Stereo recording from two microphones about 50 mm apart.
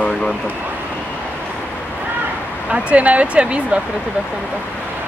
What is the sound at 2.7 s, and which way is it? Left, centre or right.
Speech, right.